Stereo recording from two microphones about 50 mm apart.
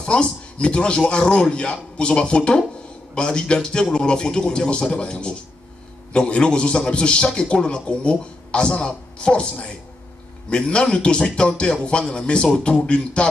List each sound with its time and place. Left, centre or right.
0.0 s a man's voice: centre